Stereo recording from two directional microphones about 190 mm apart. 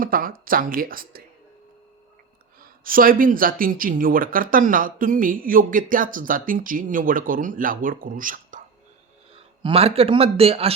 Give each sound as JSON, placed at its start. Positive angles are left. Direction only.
{"t": 0.0, "sound": "speech", "side_deg": -50}
{"t": 2.6, "sound": "speech", "side_deg": -50}
{"t": 9.3, "sound": "speech", "side_deg": -30}